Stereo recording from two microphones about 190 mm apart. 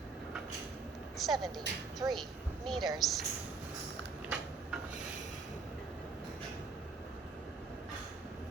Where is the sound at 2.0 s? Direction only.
15° right (ahead or behind).